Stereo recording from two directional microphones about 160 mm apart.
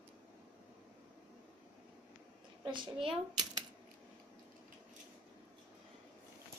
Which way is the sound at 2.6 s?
30° right (ahead or behind).